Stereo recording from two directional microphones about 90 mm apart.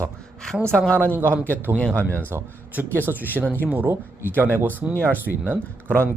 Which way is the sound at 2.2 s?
25° right (ahead or behind).